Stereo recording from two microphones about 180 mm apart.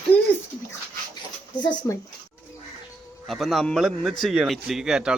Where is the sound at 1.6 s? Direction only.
15° left (ahead or behind).